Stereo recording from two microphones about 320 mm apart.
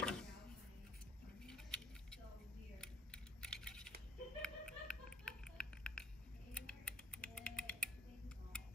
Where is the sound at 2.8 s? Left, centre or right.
Centre.